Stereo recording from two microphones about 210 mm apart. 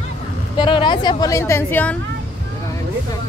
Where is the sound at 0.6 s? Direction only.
25° left (ahead or behind).